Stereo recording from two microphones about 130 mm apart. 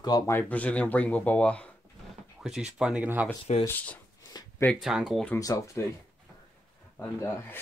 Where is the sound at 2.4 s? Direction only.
5° right (ahead or behind).